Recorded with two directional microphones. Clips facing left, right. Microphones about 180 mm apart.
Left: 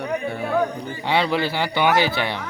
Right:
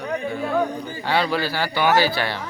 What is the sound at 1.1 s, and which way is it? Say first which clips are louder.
A man's voice: left 1 dB; 20° left (ahead or behind).